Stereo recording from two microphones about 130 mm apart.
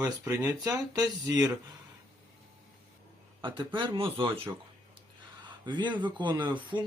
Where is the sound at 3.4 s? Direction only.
40° right (ahead or behind).